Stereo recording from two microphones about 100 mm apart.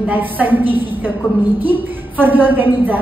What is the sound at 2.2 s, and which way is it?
Speech, 20° right (ahead or behind).